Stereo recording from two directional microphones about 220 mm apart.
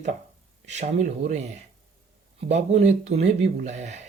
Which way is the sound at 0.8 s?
30° right (ahead or behind).